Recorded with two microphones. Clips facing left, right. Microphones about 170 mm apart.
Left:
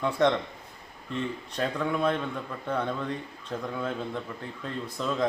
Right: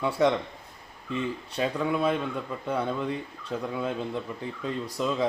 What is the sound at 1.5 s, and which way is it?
A man's voice, 10° right (ahead or behind).